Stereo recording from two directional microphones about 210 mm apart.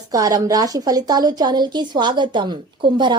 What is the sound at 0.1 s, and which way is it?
A woman's voice, 15° right (ahead or behind).